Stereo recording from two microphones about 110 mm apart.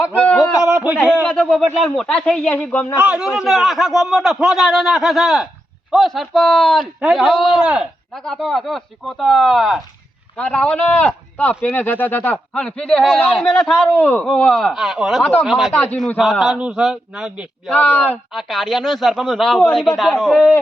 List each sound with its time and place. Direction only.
0.6 s a sound: 10° right (ahead or behind)
1.2 s speech: 10° left (ahead or behind)
3.0 s a man's voice: 10° right (ahead or behind)
8.1 s speech: 5° left (ahead or behind)
10.3 s speech: 10° left (ahead or behind)
13.9 s speech: 15° left (ahead or behind)
14.3 s speech: 5° left (ahead or behind)
17.7 s speech: 10° left (ahead or behind)
18.3 s speech: centre (ahead or behind)